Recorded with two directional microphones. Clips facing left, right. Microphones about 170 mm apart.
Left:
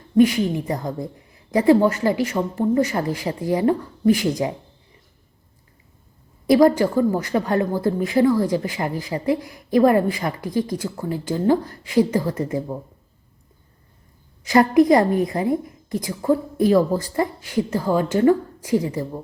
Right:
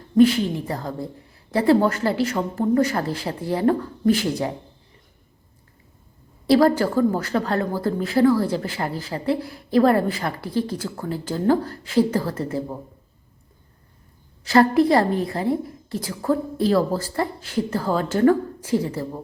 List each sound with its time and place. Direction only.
0.2 s a woman's voice: 15° left (ahead or behind)
6.5 s a woman's voice: 15° left (ahead or behind)
14.4 s a woman's voice: 15° left (ahead or behind)